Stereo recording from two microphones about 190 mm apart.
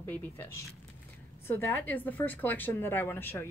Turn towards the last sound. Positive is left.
turn(degrees=10)  # may be behind; listen again after turning